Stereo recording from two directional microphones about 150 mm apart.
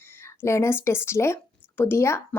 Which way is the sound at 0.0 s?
15° left (ahead or behind).